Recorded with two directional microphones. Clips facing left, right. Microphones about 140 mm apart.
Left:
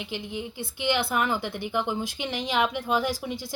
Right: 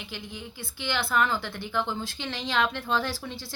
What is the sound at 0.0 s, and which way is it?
A woman's voice, 20° left (ahead or behind).